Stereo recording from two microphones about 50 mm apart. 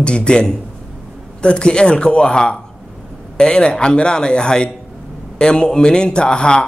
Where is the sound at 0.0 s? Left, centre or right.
Centre.